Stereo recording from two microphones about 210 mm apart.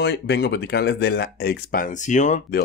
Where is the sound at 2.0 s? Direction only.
35° left (ahead or behind).